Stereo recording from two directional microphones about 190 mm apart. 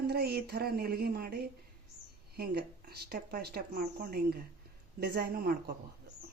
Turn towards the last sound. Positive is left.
turn(degrees=-50)  # may be behind; listen again after turning